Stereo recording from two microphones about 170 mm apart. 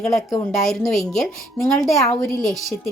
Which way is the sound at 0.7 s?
Centre (ahead or behind).